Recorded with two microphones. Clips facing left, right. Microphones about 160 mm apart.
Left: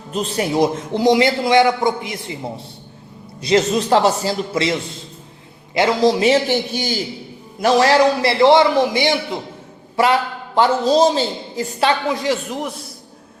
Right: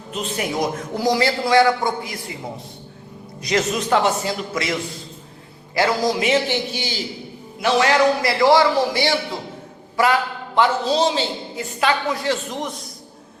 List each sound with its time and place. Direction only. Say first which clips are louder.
0.1 s a man's voice: left 5 dB; 35° left (ahead or behind)
3.4 s a man's voice: left 5 dB; 30° left (ahead or behind)
6.7 s a man's voice: left 5 dB; 45° left (ahead or behind)
7.6 s a man's voice: left 3 dB; 35° left (ahead or behind); by 9.4 s 20° left (ahead or behind)
10.0 s a man's voice: left 2 dB; 30° left (ahead or behind)
12.2 s speech: left 2 dB; 10° left (ahead or behind)